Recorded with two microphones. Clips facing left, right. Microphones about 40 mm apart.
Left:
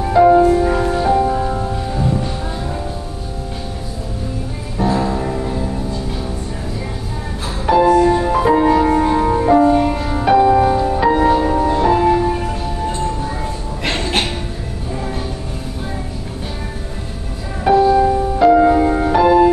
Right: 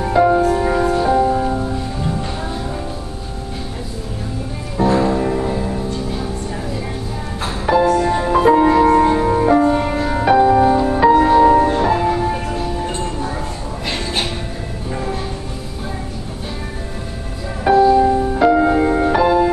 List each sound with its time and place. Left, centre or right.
0.0 s music: centre
0.8 s music: centre
4.8 s music: centre
7.7 s music: centre
9.8 s music: centre
10.2 s music: centre
11.5 s music: right
11.8 s music: centre
17.8 s music: centre